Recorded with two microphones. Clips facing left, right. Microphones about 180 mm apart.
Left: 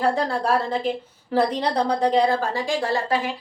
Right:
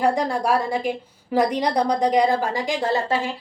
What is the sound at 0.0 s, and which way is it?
A woman's voice, 15° right (ahead or behind).